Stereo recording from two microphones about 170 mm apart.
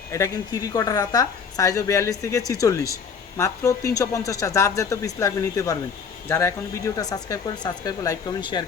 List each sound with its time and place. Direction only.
0.1 s a woman's voice: 20° left (ahead or behind)